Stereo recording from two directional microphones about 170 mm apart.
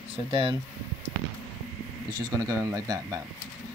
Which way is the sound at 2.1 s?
20° right (ahead or behind).